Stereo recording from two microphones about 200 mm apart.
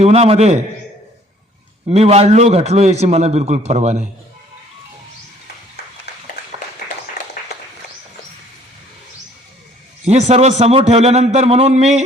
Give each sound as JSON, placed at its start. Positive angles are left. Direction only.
{"t": 0.0, "sound": "a man's voice", "side_deg": -30}
{"t": 1.9, "sound": "a man's voice", "side_deg": -30}
{"t": 7.2, "sound": "a sound", "side_deg": 55}
{"t": 10.1, "sound": "a man's voice", "side_deg": -35}